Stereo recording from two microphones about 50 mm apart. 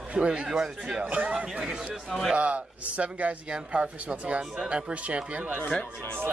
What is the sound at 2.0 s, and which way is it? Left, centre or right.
Speech, centre.